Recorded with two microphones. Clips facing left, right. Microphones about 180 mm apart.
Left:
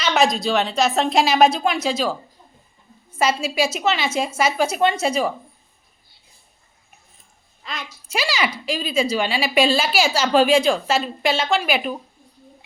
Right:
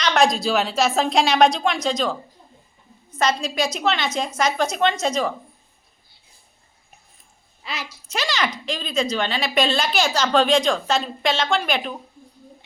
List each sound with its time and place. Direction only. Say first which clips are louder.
0.0 s a woman's voice: even; 5° left (ahead or behind)
7.6 s a woman's voice: right 1 dB; 5° right (ahead or behind)
8.0 s a woman's voice: left 2 dB; 10° left (ahead or behind)